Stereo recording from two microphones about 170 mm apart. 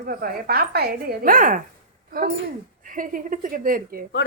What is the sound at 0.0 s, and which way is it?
Speech, 60° right (ahead or behind).